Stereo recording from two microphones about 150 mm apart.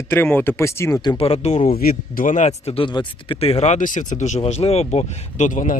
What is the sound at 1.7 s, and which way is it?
Speech, 80° left.